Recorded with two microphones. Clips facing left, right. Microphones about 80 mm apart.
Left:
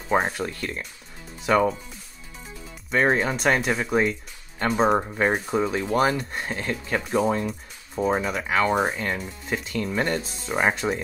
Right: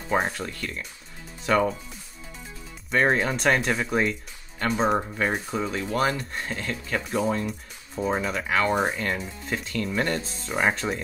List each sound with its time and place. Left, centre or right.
0.4 s speech: left
1.4 s speech: centre
2.9 s speech: centre
6.5 s speech: left
7.1 s speech: centre